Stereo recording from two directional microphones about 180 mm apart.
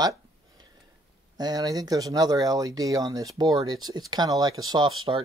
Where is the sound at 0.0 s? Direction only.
20° right (ahead or behind).